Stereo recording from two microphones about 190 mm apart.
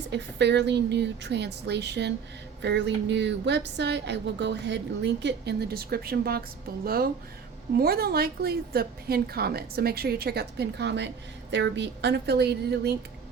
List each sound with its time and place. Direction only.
0.1 s speech: 65° right (ahead or behind)